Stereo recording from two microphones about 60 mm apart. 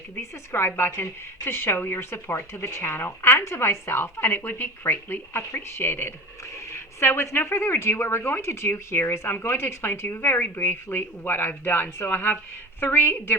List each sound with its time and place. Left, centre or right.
0.2 s a woman's voice: left